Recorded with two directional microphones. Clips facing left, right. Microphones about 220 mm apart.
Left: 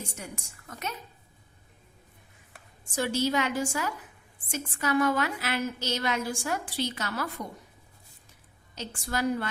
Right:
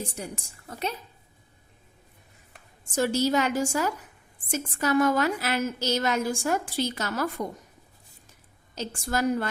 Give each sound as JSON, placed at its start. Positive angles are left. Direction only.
{"t": 0.0, "sound": "a woman's voice", "side_deg": -35}
{"t": 2.9, "sound": "a woman's voice", "side_deg": -40}
{"t": 8.7, "sound": "a woman's voice", "side_deg": -40}